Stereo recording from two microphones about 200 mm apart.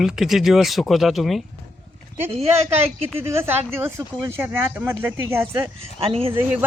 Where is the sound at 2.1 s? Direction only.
10° right (ahead or behind).